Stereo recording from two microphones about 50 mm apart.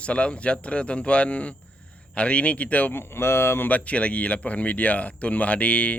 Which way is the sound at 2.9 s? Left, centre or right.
Left.